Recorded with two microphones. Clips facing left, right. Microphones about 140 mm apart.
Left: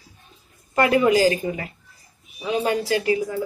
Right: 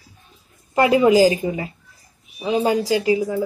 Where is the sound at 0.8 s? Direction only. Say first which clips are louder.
Right 3 dB; 20° right (ahead or behind).